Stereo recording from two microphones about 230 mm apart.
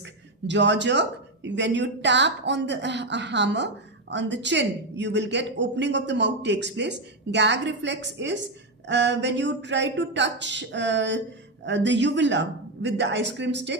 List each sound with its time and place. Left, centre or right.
0.0 s speech: right